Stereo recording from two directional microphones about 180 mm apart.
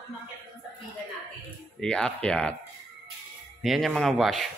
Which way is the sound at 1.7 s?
5° left (ahead or behind).